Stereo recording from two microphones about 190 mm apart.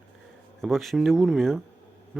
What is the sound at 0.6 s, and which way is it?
Speech, centre (ahead or behind).